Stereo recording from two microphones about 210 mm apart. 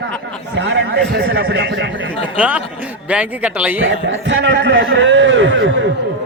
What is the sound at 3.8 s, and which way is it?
A man's voice, 60° right (ahead or behind).